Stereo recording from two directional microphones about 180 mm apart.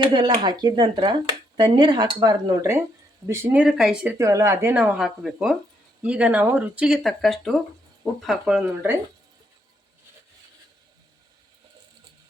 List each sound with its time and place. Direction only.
0.0 s speech: 25° right (ahead or behind)